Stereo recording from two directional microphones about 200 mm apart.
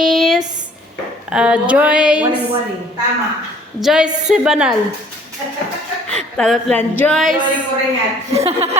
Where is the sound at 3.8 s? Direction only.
5° right (ahead or behind).